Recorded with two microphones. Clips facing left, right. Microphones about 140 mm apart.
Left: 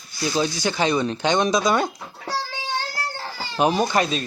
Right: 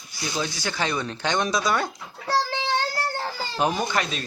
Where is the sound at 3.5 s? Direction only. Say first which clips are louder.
Left 5 dB; 20° left (ahead or behind).